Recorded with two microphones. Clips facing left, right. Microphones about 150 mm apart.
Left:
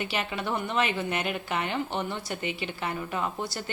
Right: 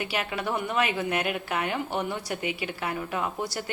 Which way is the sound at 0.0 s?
5° right (ahead or behind).